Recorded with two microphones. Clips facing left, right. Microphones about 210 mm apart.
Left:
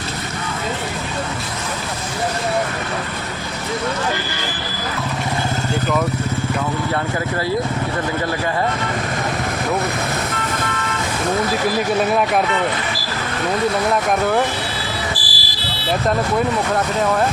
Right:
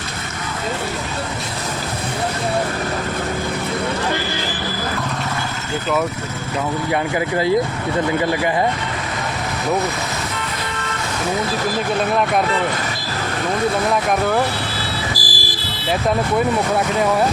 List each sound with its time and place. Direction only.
15.1 s music: 45° right (ahead or behind)